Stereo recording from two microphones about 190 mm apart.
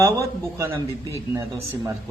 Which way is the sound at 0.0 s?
15° right (ahead or behind).